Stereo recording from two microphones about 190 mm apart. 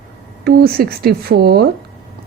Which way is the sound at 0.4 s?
55° right (ahead or behind).